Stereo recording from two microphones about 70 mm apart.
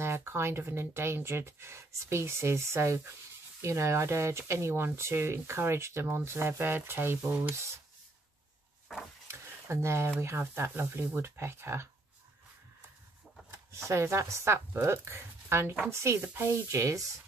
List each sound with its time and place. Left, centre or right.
0.0 s speech: right
9.3 s a sound: right
10.4 s speech: right
13.8 s speech: right